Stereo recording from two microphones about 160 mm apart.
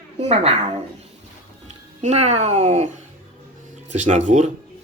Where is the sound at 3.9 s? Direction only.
45° right (ahead or behind).